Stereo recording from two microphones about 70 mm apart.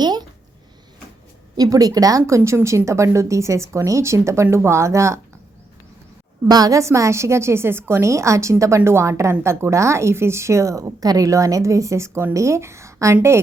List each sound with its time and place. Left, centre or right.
0.0 s a sound: right
1.5 s a woman's voice: right
6.5 s a woman's voice: right